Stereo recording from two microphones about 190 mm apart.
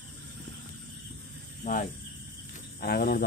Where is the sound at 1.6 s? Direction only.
45° left (ahead or behind).